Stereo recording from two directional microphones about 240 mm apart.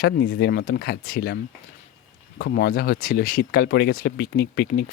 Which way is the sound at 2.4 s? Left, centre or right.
Left.